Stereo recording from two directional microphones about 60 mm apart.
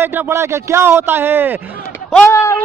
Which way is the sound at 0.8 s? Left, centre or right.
Right.